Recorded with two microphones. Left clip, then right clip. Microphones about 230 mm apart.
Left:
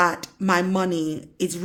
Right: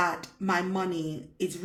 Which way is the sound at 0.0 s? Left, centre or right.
Left.